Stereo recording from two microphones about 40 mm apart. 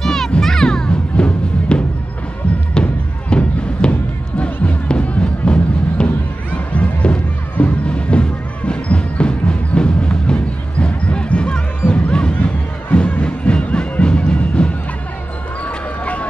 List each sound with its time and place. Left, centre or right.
0.0 s music: centre; by 6.0 s left
6.0 s music: left
15.6 s a sound: left